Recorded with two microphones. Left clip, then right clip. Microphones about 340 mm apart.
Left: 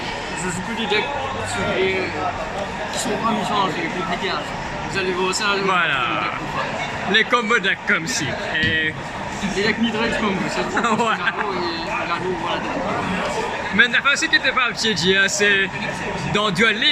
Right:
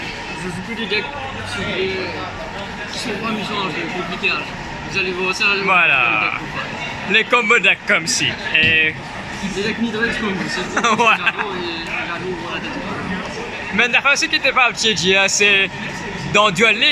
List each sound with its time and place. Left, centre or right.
4.9 s speech: centre
10.8 s speech: centre
13.7 s a man's voice: centre